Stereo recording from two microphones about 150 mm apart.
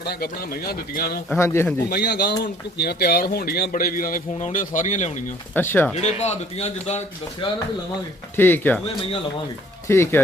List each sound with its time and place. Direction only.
0.0 s speech: 90° left
1.4 s speech: 15° left (ahead or behind)
1.9 s speech: 90° left; by 5.1 s 55° left (ahead or behind)
5.5 s speech: 15° left (ahead or behind)
6.0 s a man's voice: 50° left (ahead or behind)
8.4 s speech: 15° left (ahead or behind)
9.8 s speech: 15° left (ahead or behind)